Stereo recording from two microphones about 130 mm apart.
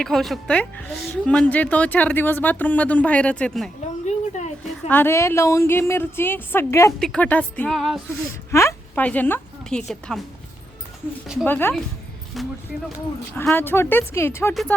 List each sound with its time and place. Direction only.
0.0 s a woman's voice: centre (ahead or behind)
4.0 s a sound: 60° left (ahead or behind)
4.9 s a woman's voice: 15° left (ahead or behind)
7.0 s a woman's voice: 10° left (ahead or behind)
7.8 s music: centre (ahead or behind)
8.4 s a sound: 20° left (ahead or behind)
9.0 s a woman's voice: 15° left (ahead or behind)
11.4 s a woman's voice: 15° left (ahead or behind)
12.3 s music: centre (ahead or behind)
13.3 s a woman's voice: 15° left (ahead or behind)